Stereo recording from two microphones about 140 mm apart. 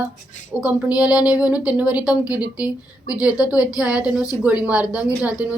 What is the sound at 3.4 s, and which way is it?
A woman's voice, 10° right (ahead or behind).